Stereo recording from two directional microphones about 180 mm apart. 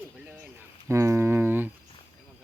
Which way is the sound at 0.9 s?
15° right (ahead or behind).